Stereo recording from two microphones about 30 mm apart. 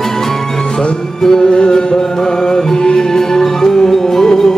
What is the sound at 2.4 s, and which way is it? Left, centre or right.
Music, left.